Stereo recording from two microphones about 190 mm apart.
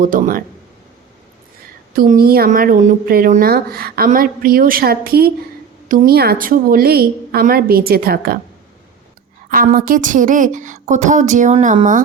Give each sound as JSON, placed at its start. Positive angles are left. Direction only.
{"t": 0.0, "sound": "a woman's voice", "side_deg": -45}
{"t": 2.0, "sound": "a woman's voice", "side_deg": -50}
{"t": 9.5, "sound": "speech", "side_deg": -50}